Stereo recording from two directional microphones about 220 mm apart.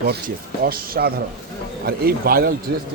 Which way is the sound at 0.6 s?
40° right (ahead or behind).